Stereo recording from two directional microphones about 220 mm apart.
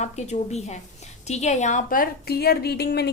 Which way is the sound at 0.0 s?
30° left (ahead or behind).